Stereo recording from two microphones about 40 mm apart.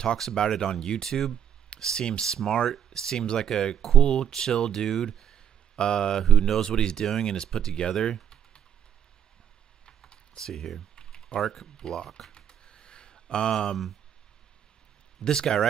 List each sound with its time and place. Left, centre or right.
0.2 s speech: centre
1.0 s speech: centre
9.8 s typing: centre
11.4 s speech: centre
11.7 s speech: centre
12.3 s typing: left
15.2 s speech: centre